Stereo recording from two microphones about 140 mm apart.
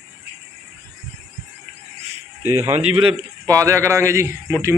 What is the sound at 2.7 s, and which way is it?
Speech, 50° right (ahead or behind).